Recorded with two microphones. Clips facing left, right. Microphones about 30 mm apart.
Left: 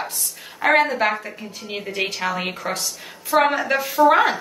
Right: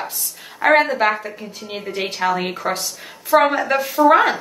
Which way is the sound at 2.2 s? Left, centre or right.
Centre.